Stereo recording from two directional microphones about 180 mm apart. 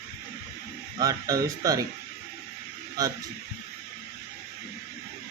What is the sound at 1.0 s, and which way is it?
Speech, 20° right (ahead or behind).